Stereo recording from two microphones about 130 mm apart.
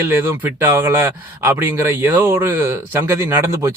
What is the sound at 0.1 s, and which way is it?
Speech, 15° right (ahead or behind).